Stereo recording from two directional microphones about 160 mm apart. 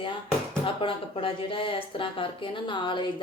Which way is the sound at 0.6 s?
35° left (ahead or behind).